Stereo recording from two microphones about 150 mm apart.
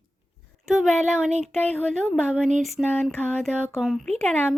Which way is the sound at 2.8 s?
15° left (ahead or behind).